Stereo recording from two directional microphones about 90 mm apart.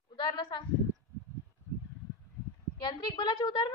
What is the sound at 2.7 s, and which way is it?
Speech, 50° left (ahead or behind).